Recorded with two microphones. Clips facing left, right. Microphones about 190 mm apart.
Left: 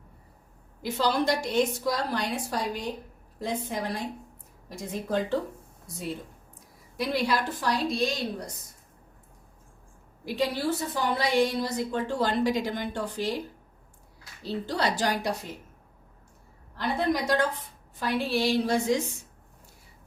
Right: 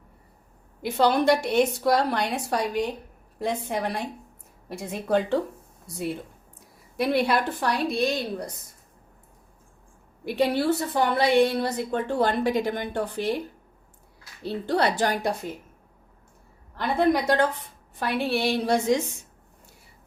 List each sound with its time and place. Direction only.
0.8 s a woman's voice: 60° right (ahead or behind)
6.9 s a woman's voice: 60° right (ahead or behind)
10.2 s a woman's voice: 60° right (ahead or behind)
14.4 s a woman's voice: 60° right (ahead or behind)
16.7 s a woman's voice: 60° right (ahead or behind)